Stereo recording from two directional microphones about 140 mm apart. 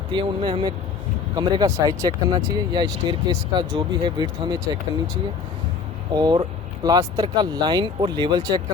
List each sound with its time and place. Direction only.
0.1 s speech: 35° right (ahead or behind)
6.1 s speech: 30° right (ahead or behind)